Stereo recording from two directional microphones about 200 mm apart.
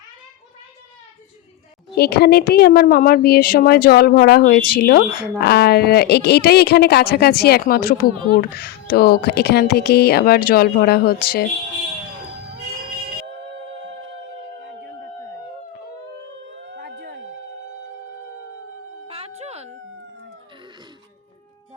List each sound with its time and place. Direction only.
2.0 s speech: 55° left (ahead or behind)
16.5 s howl: 65° right (ahead or behind)
19.0 s music: 30° right (ahead or behind)